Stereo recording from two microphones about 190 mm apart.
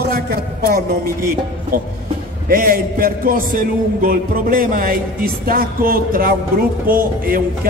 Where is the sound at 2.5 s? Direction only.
50° right (ahead or behind).